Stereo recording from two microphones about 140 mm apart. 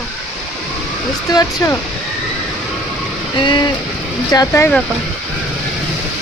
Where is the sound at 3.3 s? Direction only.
35° left (ahead or behind).